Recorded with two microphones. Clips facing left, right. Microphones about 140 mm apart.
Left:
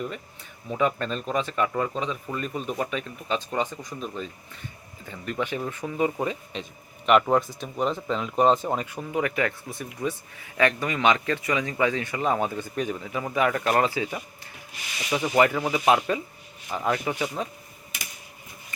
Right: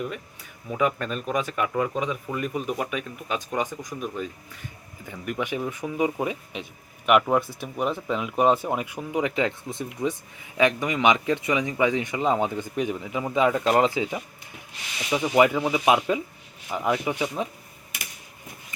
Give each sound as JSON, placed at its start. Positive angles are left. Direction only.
{"t": 0.7, "sound": "speech", "side_deg": -5}
{"t": 15.4, "sound": "speech", "side_deg": -15}